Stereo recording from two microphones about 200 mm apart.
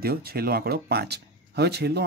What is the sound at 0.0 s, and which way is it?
Speech, 50° right (ahead or behind).